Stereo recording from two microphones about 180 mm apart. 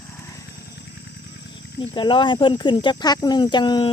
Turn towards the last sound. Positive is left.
turn(degrees=25)  # may be behind; listen again after turning